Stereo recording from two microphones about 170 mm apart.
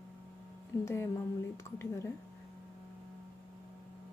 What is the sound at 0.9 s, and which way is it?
Speech, 15° left (ahead or behind).